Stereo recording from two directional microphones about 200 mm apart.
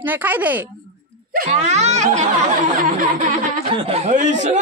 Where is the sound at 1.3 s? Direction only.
35° right (ahead or behind).